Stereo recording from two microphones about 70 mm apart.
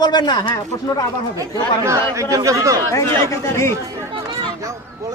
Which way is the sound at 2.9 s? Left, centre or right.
Left.